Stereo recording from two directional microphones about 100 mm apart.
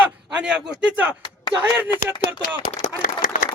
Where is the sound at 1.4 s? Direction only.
50° left (ahead or behind).